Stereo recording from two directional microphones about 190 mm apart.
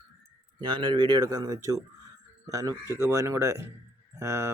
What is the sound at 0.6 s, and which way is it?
Speech, 25° right (ahead or behind).